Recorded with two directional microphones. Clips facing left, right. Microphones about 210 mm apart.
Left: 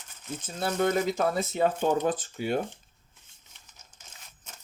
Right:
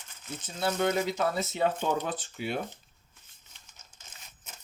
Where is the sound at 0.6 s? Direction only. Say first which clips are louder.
Left 2 dB; 45° left (ahead or behind).